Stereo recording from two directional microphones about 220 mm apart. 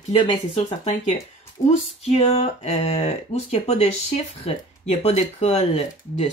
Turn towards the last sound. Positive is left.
turn(degrees=30)  # may be behind; listen again after turning